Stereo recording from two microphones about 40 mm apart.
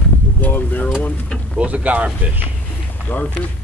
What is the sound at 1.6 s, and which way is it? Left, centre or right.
Speech, right.